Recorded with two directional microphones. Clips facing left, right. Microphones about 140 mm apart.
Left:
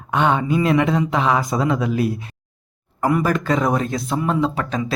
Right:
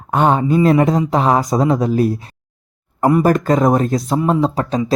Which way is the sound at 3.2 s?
45° right (ahead or behind).